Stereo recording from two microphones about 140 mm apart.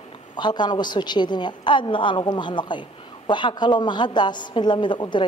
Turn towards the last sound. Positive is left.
turn(degrees=35)  # may be behind; listen again after turning